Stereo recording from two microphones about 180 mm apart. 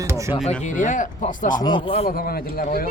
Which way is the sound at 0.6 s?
40° left (ahead or behind).